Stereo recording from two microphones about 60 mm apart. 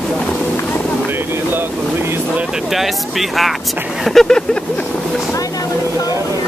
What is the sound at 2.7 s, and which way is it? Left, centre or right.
Speech, centre.